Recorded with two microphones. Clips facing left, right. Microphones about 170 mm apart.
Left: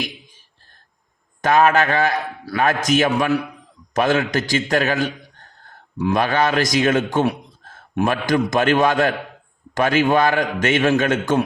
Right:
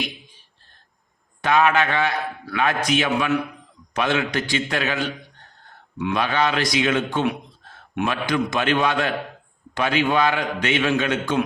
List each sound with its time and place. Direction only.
1.4 s a man's voice: 45° left (ahead or behind)